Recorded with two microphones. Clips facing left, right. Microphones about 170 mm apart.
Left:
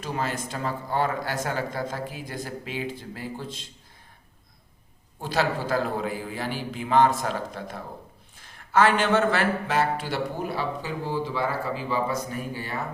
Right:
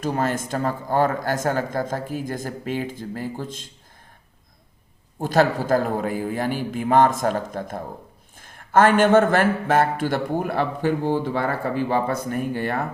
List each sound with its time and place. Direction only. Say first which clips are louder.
0.0 s speech: right 6 dB; 50° right (ahead or behind)
5.2 s a man's voice: right 6 dB; 45° right (ahead or behind)